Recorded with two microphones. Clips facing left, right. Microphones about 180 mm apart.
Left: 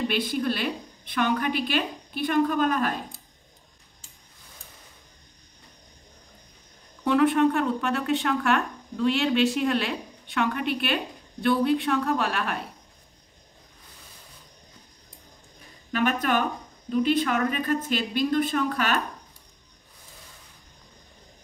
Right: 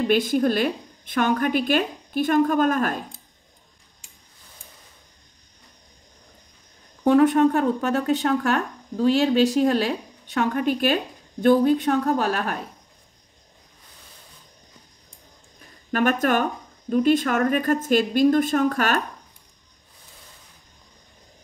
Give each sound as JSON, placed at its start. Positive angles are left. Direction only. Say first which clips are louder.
{"t": 0.0, "sound": "a woman's voice", "louder": "right 6 dB", "side_deg": -45}
{"t": 7.1, "sound": "speech", "louder": "right 4 dB", "side_deg": -40}
{"t": 15.9, "sound": "a woman's voice", "louder": "right 4 dB", "side_deg": -45}